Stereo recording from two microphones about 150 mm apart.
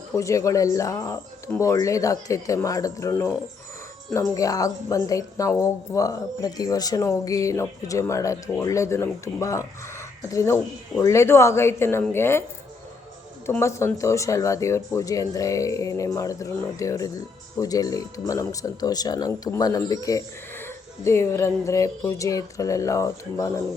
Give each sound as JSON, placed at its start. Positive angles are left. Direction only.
{"t": 0.2, "sound": "speech", "side_deg": 20}
{"t": 13.6, "sound": "speech", "side_deg": 20}